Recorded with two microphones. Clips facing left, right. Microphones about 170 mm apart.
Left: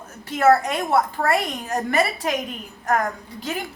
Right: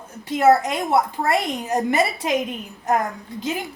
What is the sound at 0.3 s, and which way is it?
A woman's voice, 15° right (ahead or behind).